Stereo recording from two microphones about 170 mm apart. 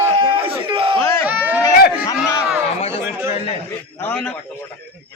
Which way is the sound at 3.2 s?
35° left (ahead or behind).